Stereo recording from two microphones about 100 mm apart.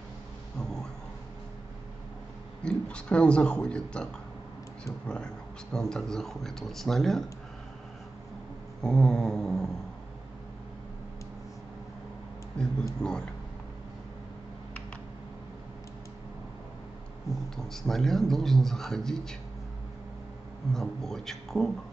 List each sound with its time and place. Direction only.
0.6 s a sound: 5° left (ahead or behind)
2.6 s a man's voice: 10° left (ahead or behind)
8.8 s a man's voice: 5° left (ahead or behind)
12.6 s speech: 10° left (ahead or behind)
17.6 s a man's voice: 5° left (ahead or behind)
20.7 s a man's voice: 5° left (ahead or behind)